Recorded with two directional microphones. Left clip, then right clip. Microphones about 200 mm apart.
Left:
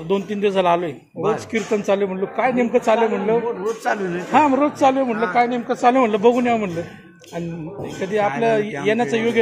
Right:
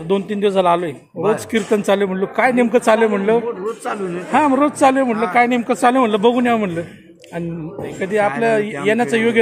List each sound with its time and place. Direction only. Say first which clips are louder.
0.1 s a man's voice: right 3 dB; 15° right (ahead or behind)
1.5 s a man's voice: right 3 dB; 25° right (ahead or behind)
3.6 s a man's voice: left 1 dB; 15° left (ahead or behind)
4.3 s a man's voice: right 1 dB; 15° right (ahead or behind)
5.4 s speech: right 3 dB; 35° right (ahead or behind)
5.9 s a man's voice: right 1 dB; 15° right (ahead or behind)
8.0 s a man's voice: right 2 dB; 15° right (ahead or behind)